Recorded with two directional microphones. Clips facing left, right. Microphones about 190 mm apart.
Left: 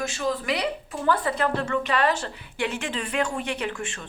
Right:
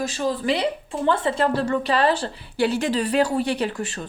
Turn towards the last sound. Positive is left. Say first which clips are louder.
# right 5 dB
turn(degrees=-35)  # may be behind; listen again after turning